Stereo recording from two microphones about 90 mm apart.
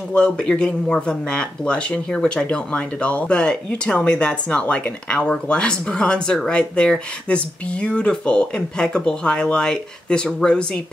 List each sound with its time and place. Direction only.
0.1 s speech: 10° left (ahead or behind)